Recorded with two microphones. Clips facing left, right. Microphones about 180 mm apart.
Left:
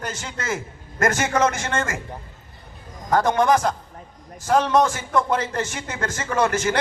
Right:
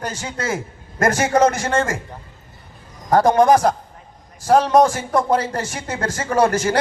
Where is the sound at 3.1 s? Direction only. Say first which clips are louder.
Right 5 dB; 35° right (ahead or behind).